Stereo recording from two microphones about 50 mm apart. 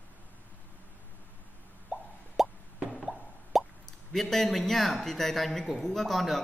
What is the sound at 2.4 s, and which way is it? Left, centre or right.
Plop, centre.